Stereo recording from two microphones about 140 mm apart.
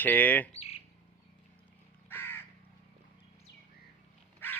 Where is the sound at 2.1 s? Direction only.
15° left (ahead or behind).